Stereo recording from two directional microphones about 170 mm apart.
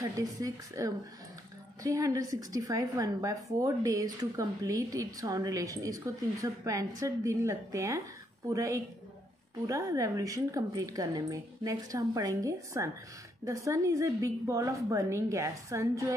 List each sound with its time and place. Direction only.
0.0 s a woman's voice: 20° right (ahead or behind)